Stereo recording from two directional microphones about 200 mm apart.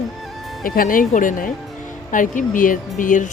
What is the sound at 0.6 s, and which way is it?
Speech, 45° left (ahead or behind).